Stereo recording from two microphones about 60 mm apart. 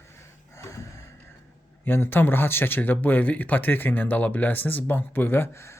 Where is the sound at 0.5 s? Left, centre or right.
Left.